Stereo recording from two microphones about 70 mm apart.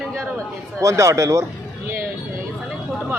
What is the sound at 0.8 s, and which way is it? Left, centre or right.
Speech, right.